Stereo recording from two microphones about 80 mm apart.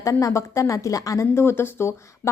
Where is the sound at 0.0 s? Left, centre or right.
Left.